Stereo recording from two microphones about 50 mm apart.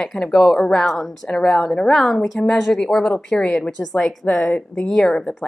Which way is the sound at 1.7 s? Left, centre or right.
Left.